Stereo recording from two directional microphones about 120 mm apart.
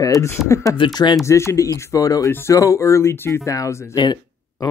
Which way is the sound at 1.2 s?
25° left (ahead or behind).